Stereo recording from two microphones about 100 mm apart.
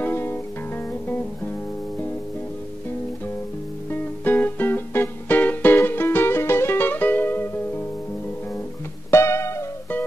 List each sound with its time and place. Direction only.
0.0 s music: 20° left (ahead or behind)
3.9 s music: 20° left (ahead or behind)
9.1 s music: 30° left (ahead or behind)